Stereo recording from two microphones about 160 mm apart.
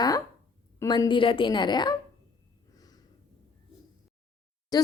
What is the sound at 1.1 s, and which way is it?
Speech, 30° left (ahead or behind).